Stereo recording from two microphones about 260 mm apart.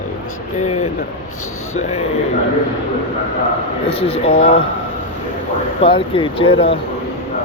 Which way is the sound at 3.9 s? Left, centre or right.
Left.